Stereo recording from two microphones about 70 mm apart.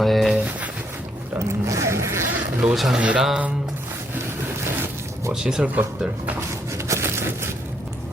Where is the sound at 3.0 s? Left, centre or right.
Centre.